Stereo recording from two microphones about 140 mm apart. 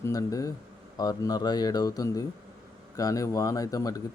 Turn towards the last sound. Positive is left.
turn(degrees=25)  # may be behind; listen again after turning